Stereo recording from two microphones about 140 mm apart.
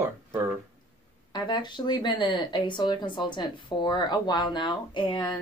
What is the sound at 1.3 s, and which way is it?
Speech, 30° left (ahead or behind).